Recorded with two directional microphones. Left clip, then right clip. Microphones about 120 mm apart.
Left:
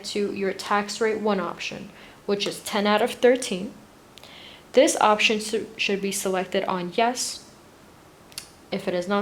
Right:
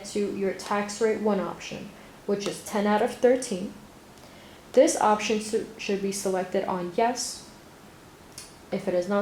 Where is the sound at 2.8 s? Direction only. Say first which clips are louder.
Left 3 dB; 40° left (ahead or behind).